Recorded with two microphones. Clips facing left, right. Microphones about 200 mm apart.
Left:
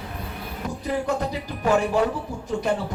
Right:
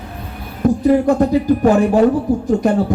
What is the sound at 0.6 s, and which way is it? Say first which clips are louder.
A man's voice: right 14 dB; 50° right (ahead or behind).